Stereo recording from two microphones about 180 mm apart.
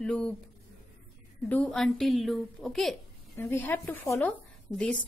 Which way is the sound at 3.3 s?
10° left (ahead or behind).